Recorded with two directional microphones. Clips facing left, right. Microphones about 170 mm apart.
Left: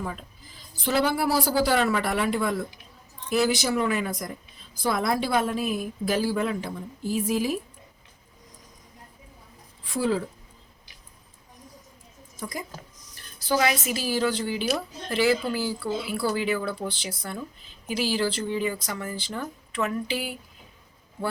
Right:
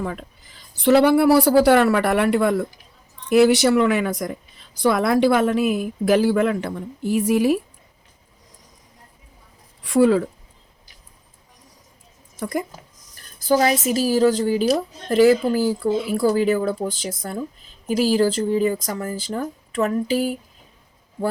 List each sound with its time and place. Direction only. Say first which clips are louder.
0.8 s a woman's voice: right 10 dB; 65° right (ahead or behind)
4.8 s a woman's voice: right 8 dB; 70° right (ahead or behind)
9.8 s speech: right 10 dB; 75° right (ahead or behind)
12.4 s speech: right 9 dB; 60° right (ahead or behind)
13.1 s speech: right 6 dB; 40° right (ahead or behind)